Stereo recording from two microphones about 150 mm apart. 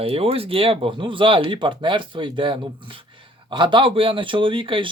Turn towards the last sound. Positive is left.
turn(degrees=-35)  # may be behind; listen again after turning